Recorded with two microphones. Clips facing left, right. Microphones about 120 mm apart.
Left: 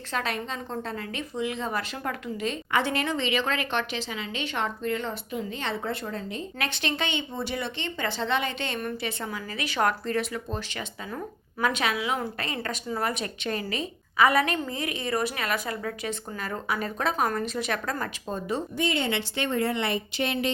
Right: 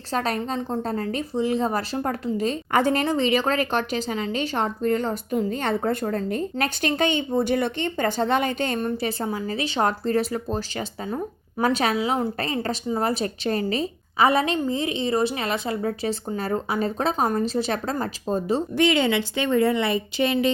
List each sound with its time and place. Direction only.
0.1 s a woman's voice: 35° right (ahead or behind)
18.8 s a woman's voice: 90° right